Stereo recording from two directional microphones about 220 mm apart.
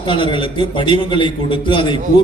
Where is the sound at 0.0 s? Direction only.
20° left (ahead or behind).